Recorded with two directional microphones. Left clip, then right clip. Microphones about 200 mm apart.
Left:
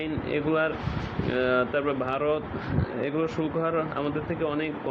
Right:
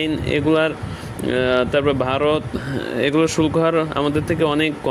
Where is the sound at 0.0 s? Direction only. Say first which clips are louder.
Right 8 dB; 55° right (ahead or behind).